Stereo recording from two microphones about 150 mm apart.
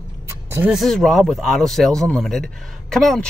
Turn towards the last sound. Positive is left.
turn(degrees=0)  # may be behind; listen again after turning